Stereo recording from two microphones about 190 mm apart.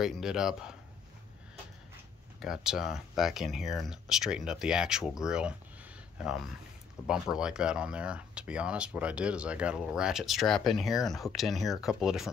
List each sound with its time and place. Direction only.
0.0 s speech: centre (ahead or behind)
2.4 s speech: 5° right (ahead or behind)